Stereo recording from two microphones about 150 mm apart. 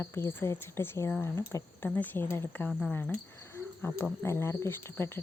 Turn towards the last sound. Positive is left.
turn(degrees=15)  # may be behind; listen again after turning